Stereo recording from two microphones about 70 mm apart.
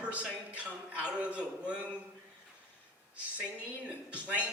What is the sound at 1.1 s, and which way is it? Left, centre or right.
Speech, centre.